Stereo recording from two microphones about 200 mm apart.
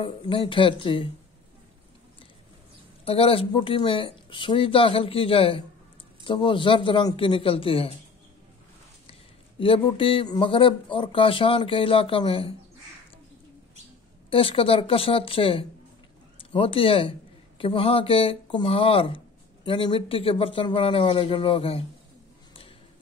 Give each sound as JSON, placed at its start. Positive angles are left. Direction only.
{"t": 0.0, "sound": "speech", "side_deg": 25}
{"t": 3.1, "sound": "speech", "side_deg": 30}
{"t": 9.6, "sound": "speech", "side_deg": 25}
{"t": 14.3, "sound": "speech", "side_deg": 25}